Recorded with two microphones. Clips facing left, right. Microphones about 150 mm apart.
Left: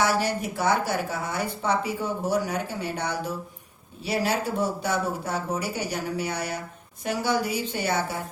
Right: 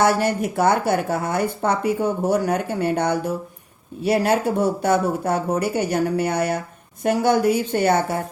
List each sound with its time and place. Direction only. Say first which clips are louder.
0.0 s a woman's voice: right 6 dB; 55° right (ahead or behind)